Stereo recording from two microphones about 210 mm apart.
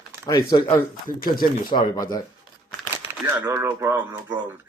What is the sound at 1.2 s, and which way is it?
Speech, 45° left (ahead or behind).